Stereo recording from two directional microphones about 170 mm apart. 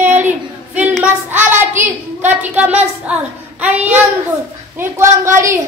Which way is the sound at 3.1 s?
10° right (ahead or behind).